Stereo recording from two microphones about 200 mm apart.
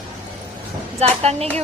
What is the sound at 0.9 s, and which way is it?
Speech, 30° right (ahead or behind).